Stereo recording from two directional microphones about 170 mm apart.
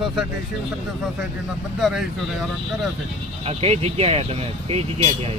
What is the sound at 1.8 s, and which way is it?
Speech, centre (ahead or behind).